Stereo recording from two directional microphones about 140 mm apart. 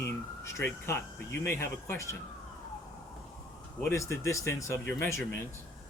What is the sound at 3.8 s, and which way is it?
Speech, 20° left (ahead or behind).